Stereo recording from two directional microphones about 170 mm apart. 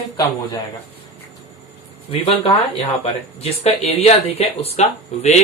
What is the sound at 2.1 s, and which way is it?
Speech, 35° left (ahead or behind).